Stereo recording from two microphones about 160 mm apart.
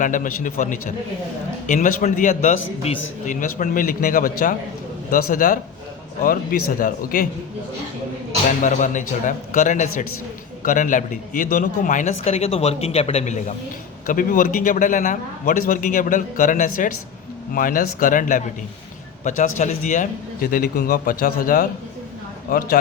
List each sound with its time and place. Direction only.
0.0 s a man's voice: 55° left (ahead or behind)
8.6 s a man's voice: 50° left (ahead or behind)
14.1 s a man's voice: 55° left (ahead or behind)